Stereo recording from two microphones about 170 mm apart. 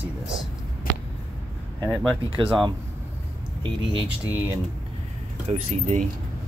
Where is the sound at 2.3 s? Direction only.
30° right (ahead or behind).